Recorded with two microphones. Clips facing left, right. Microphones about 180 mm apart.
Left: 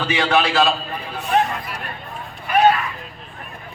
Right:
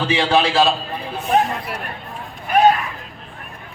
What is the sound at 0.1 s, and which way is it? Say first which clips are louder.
Speech: right 1 dB; 30° right (ahead or behind).